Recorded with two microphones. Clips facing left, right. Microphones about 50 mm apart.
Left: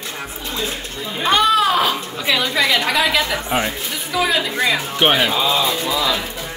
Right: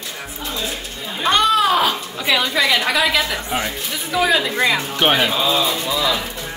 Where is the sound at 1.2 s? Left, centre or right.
Centre.